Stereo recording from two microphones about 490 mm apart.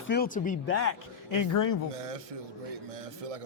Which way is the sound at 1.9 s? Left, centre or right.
Right.